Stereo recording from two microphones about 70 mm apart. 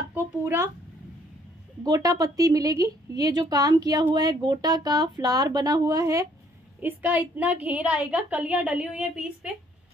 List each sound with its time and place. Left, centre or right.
0.1 s speech: right
1.8 s a woman's voice: right
6.8 s a woman's voice: right